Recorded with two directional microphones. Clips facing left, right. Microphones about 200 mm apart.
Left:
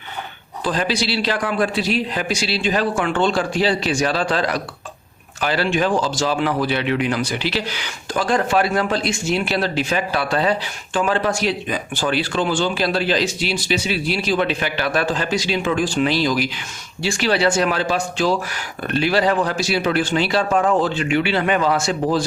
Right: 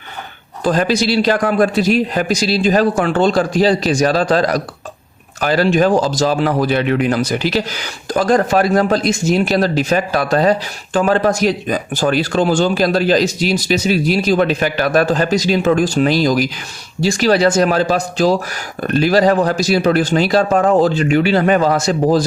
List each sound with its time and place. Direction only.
0.6 s speech: 45° right (ahead or behind)